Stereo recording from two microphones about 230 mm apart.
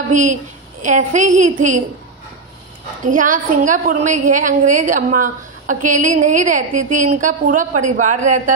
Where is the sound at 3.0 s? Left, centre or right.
Right.